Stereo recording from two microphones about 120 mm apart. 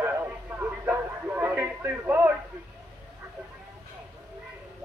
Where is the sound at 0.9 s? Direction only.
15° right (ahead or behind).